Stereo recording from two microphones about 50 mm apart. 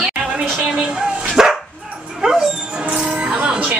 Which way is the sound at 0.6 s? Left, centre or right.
Centre.